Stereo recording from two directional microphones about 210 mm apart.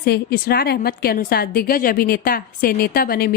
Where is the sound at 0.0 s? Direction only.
50° left (ahead or behind).